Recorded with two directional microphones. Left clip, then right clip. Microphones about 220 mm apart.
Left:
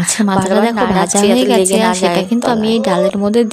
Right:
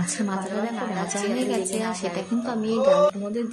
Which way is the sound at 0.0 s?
45° left (ahead or behind).